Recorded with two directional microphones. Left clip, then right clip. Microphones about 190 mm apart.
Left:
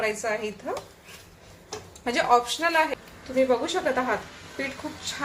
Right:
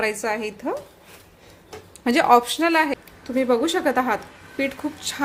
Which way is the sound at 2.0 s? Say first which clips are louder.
Right 5 dB; 55° right (ahead or behind).